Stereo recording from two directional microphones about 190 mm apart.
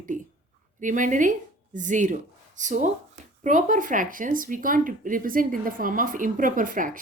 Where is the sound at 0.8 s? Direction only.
45° right (ahead or behind).